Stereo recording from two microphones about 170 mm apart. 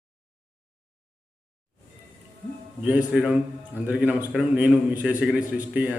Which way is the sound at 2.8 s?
10° right (ahead or behind).